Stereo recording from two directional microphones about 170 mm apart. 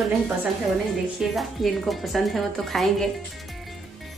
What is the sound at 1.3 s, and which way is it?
A woman's voice, centre (ahead or behind).